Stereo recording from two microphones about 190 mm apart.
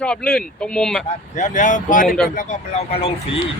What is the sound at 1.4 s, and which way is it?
Speech, 40° left (ahead or behind).